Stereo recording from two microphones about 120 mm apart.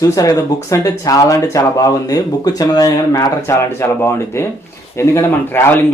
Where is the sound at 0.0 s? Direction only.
30° left (ahead or behind).